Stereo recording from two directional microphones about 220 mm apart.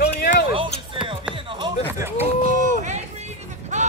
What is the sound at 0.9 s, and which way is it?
Music, 25° right (ahead or behind).